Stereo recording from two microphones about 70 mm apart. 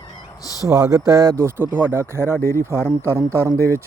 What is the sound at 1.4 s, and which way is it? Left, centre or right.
A man's voice, right.